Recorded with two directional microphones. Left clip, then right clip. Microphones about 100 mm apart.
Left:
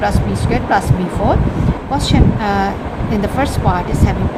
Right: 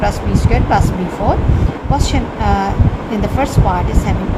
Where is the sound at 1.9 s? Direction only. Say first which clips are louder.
Left 2 dB; 5° left (ahead or behind).